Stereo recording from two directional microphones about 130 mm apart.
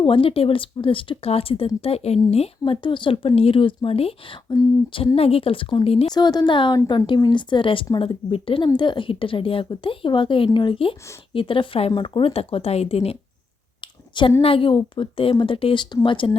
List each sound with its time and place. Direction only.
0.0 s speech: 45° left (ahead or behind)
6.1 s speech: 35° left (ahead or behind); by 13.1 s 50° left (ahead or behind)
14.4 s speech: 45° left (ahead or behind)